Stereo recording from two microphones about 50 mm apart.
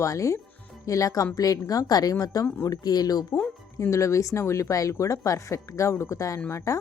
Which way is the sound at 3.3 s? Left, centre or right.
Left.